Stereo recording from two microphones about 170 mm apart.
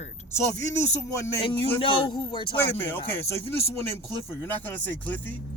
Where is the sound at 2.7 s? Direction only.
15° left (ahead or behind).